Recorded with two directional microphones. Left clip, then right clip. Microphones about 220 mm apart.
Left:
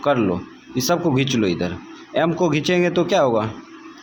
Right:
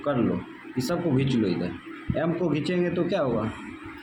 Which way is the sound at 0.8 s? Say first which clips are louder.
Left 7 dB; 30° left (ahead or behind).